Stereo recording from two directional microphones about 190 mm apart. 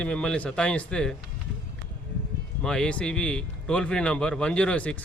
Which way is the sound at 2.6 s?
5° left (ahead or behind).